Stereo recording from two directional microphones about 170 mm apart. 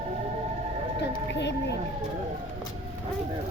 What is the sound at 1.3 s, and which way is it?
Speech, 90° left.